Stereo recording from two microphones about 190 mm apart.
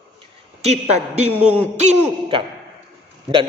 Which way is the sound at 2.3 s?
30° right (ahead or behind).